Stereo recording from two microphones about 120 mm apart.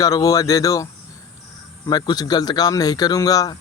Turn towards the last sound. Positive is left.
turn(degrees=30)  # may be behind; listen again after turning